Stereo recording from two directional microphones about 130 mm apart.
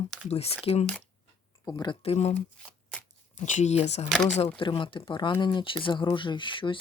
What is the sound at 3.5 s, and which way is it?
Speech, 65° left (ahead or behind).